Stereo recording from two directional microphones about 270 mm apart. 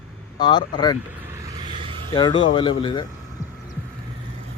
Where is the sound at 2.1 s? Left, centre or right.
Centre.